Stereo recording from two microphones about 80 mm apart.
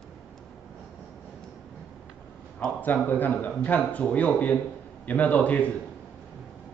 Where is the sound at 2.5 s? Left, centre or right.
Centre.